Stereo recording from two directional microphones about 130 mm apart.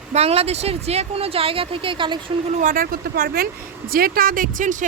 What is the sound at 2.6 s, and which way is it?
Speech, 90° right.